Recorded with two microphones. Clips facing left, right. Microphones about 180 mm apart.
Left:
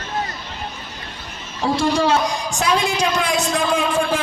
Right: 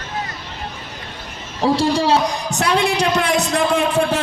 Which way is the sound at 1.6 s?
35° right (ahead or behind).